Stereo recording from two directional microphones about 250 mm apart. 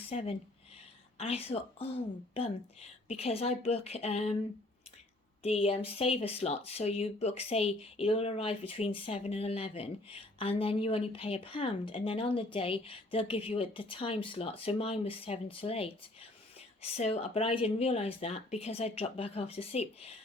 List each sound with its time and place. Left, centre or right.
0.1 s speech: left
3.1 s speech: left
5.4 s speech: left